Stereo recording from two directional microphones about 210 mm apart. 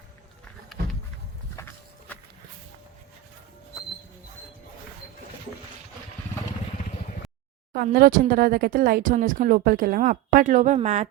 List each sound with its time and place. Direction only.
0.8 s a sound: 50° right (ahead or behind)
1.5 s horse: 10° left (ahead or behind)
7.7 s speech: 45° right (ahead or behind)